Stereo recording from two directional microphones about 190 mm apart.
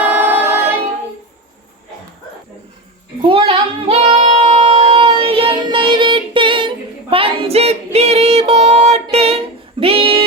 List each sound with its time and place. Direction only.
0.0 s music: 10° right (ahead or behind)
3.2 s child singing: 30° right (ahead or behind)
9.1 s a sound: 35° right (ahead or behind)